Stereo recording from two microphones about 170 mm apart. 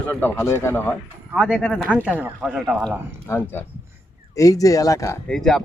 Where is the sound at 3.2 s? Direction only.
15° left (ahead or behind).